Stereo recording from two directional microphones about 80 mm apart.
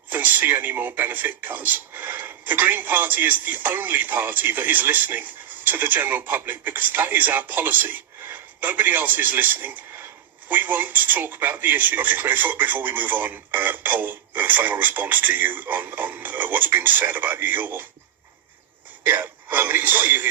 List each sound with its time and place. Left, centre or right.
0.1 s speech: right
19.0 s speech: right